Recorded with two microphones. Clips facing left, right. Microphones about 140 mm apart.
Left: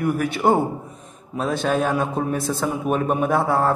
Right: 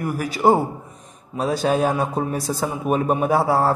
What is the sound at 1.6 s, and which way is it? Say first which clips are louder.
A man's voice: right 1 dB; 35° right (ahead or behind).